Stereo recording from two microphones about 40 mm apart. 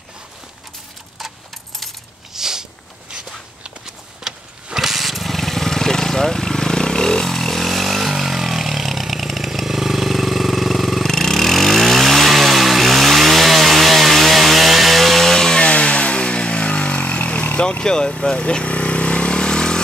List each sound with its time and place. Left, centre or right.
2.3 s a sound: centre
3.8 s a sound: centre
4.8 s vehicle: centre
11.1 s vehicle: centre
15.6 s vehicle: left
17.6 s vehicle: left